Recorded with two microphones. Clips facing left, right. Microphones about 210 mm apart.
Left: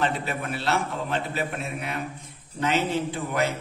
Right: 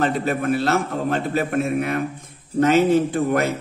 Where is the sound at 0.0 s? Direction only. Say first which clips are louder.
Right 7 dB; 45° right (ahead or behind).